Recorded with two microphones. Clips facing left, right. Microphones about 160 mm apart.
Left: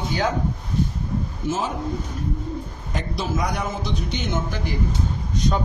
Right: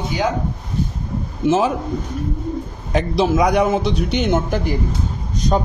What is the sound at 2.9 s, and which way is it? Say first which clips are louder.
A man's voice: right 10 dB; 85° right.